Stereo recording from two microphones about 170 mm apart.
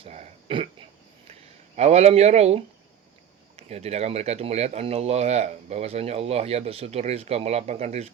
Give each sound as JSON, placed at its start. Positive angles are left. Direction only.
{"t": 0.0, "sound": "a sound", "side_deg": -35}
{"t": 1.3, "sound": "speech", "side_deg": -40}
{"t": 3.6, "sound": "speech", "side_deg": -40}